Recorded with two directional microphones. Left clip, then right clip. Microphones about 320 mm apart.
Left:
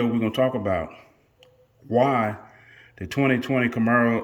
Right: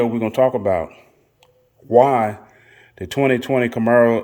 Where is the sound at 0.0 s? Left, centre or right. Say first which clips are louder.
Right 6 dB; centre.